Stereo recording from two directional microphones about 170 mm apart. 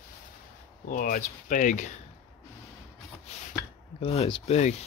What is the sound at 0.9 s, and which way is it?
Speech, 55° left (ahead or behind).